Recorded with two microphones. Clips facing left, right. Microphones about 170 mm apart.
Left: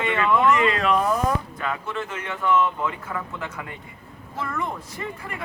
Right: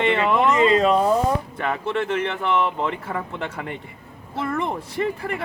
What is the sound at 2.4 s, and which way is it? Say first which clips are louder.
A man's voice: even; 30° right (ahead or behind).